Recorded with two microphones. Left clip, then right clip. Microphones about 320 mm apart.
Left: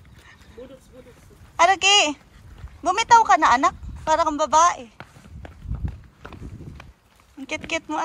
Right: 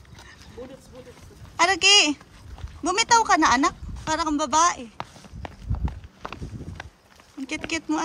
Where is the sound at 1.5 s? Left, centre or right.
Centre.